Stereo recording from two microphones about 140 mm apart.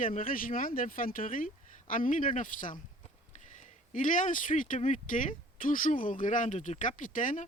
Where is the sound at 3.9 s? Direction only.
65° left (ahead or behind).